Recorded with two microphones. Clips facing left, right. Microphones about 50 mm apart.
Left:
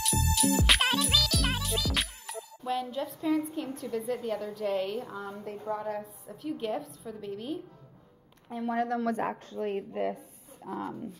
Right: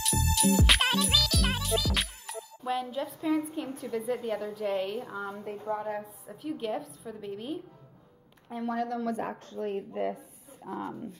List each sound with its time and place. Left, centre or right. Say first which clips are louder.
0.3 s music: right 1 dB; centre
4.1 s a woman's voice: right 2 dB; centre
8.7 s a woman's voice: left 3 dB; left
9.0 s speech: left 2 dB; left
9.6 s a woman's voice: even; left
10.6 s speech: even; centre